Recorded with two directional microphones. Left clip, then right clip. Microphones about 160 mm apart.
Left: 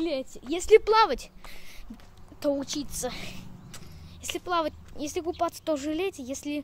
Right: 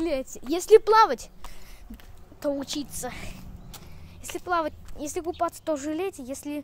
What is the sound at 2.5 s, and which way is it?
Speech, 5° right (ahead or behind).